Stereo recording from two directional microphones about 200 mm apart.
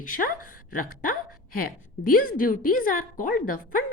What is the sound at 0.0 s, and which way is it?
A woman's voice, 45° left (ahead or behind).